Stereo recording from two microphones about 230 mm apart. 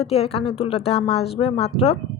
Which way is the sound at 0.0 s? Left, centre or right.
Left.